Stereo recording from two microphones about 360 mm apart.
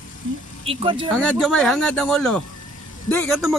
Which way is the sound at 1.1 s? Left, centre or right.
Centre.